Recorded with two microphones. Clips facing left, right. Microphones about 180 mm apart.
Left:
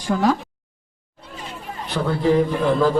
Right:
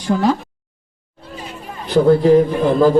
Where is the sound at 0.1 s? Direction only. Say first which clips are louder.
Right 3 dB; 15° right (ahead or behind).